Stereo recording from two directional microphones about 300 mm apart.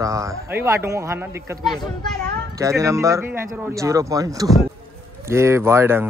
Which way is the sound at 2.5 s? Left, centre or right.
Centre.